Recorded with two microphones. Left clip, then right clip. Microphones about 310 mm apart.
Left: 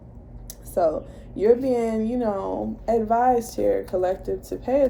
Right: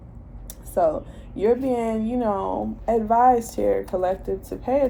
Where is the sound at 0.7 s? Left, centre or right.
Centre.